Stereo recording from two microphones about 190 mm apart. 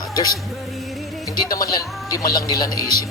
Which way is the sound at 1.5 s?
20° left (ahead or behind).